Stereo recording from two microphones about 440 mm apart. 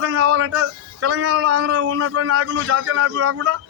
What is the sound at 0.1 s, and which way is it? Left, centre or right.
A man's voice, right.